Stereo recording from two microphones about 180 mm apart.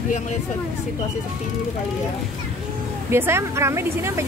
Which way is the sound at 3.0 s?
15° right (ahead or behind).